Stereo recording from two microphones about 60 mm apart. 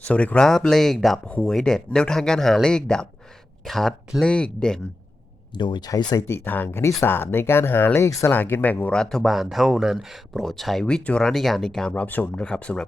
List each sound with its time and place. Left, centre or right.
0.0 s speech: left
0.4 s speech: centre
4.2 s speech: centre
5.8 s speech: left
6.3 s speech: left
8.9 s speech: centre
9.2 s speech: centre
10.3 s speech: centre
10.8 s speech: centre
11.9 s speech: left